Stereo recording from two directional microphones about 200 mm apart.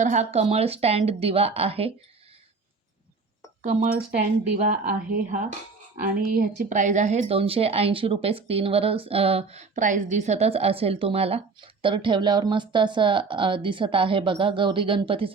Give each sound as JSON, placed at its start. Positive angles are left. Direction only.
{"t": 0.0, "sound": "speech", "side_deg": -35}
{"t": 3.6, "sound": "speech", "side_deg": -40}